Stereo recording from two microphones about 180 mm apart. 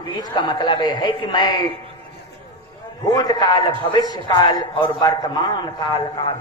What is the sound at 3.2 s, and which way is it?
A woman's voice, 25° left (ahead or behind).